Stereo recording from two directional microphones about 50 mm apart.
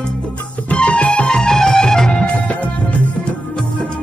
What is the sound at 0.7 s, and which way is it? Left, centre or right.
Music, left.